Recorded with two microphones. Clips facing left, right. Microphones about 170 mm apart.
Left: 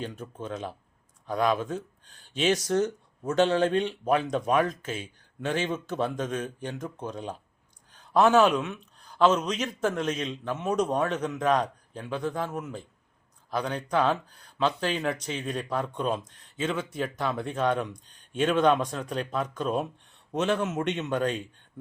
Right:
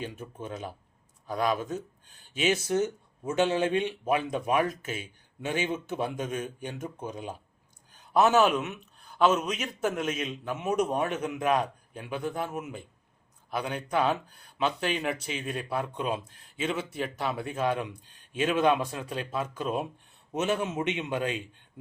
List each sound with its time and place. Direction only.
0.0 s a man's voice: 10° right (ahead or behind)
1.5 s speech: 50° left (ahead or behind)
2.3 s a man's voice: 5° right (ahead or behind)